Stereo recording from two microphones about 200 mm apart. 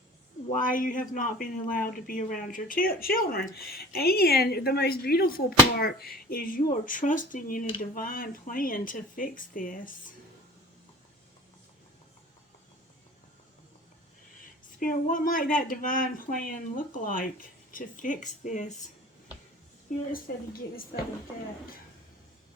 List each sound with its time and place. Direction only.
0.5 s speech: 45° left (ahead or behind)
14.8 s a woman's voice: 40° left (ahead or behind)